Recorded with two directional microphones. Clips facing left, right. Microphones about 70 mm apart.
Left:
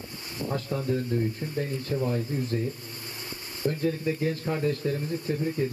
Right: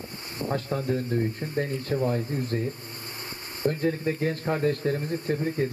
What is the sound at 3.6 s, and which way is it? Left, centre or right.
Speech, right.